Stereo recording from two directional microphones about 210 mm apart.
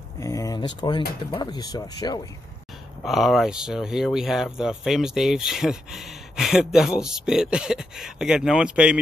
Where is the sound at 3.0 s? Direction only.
Centre (ahead or behind).